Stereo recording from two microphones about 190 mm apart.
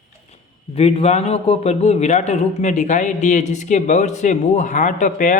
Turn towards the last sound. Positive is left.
turn(degrees=40)  # may be behind; listen again after turning